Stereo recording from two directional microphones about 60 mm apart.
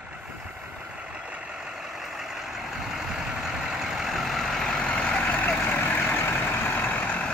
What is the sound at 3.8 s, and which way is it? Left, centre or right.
Vehicle, centre.